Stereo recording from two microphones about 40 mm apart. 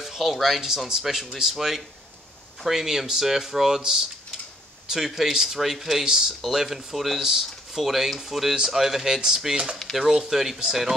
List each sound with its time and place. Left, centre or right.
0.0 s speech: centre
6.0 s speech: centre